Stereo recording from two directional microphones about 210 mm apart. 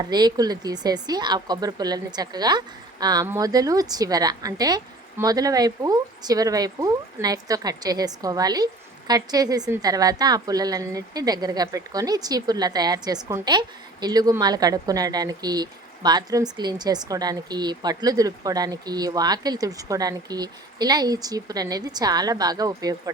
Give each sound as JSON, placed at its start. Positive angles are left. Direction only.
{"t": 0.0, "sound": "speech", "side_deg": -20}